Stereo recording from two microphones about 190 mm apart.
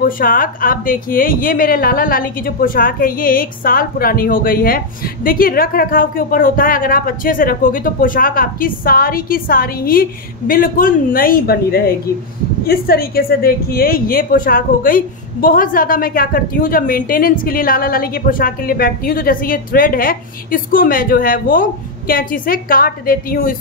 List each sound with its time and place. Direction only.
0.0 s a woman's voice: 50° left (ahead or behind)